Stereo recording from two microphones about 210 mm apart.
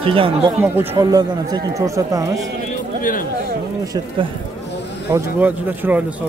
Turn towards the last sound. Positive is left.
turn(degrees=-10)  # may be behind; listen again after turning